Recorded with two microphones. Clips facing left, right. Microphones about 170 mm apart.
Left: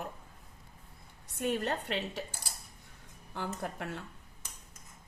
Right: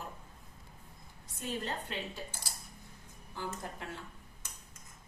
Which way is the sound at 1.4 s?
65° left (ahead or behind).